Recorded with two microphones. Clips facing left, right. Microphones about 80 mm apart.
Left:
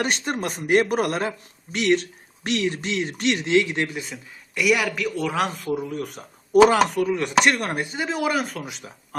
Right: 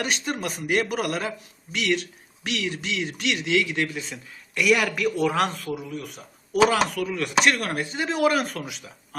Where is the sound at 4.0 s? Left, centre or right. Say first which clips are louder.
Left 1 dB; centre.